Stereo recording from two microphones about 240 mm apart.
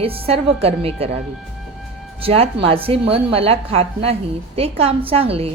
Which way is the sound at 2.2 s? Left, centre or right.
Right.